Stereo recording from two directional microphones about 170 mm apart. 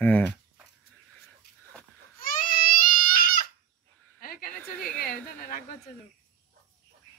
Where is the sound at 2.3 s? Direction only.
55° left (ahead or behind).